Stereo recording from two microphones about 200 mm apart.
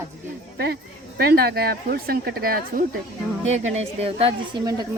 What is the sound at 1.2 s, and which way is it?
Speech, 50° right (ahead or behind).